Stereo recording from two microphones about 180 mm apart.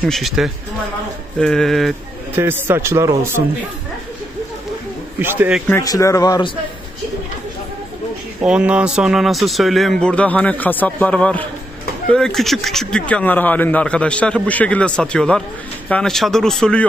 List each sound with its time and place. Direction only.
0.0 s speech: centre (ahead or behind)
2.3 s speech: 10° right (ahead or behind)
5.2 s speech: 10° right (ahead or behind)
5.7 s speech: 20° left (ahead or behind)
8.4 s speech: 5° right (ahead or behind)